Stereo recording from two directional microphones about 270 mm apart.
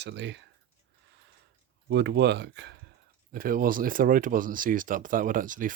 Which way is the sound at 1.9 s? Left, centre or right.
Right.